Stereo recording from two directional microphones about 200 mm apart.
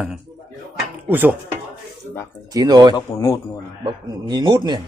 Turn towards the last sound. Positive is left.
turn(degrees=-20)  # may be behind; listen again after turning